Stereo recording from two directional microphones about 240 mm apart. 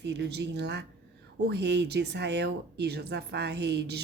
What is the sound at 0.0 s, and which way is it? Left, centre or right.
A woman's voice, right.